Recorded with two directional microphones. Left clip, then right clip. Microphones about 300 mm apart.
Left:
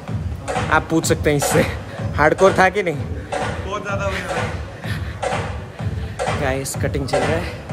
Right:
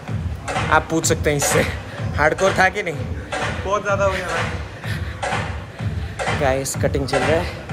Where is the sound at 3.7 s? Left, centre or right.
Centre.